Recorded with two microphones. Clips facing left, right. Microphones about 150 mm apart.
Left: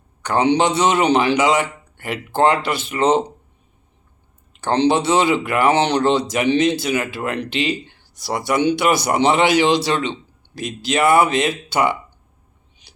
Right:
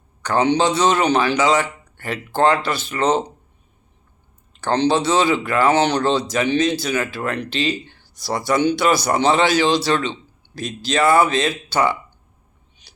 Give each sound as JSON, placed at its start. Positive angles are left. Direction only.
{"t": 0.2, "sound": "speech", "side_deg": 20}
{"t": 4.5, "sound": "speech", "side_deg": 25}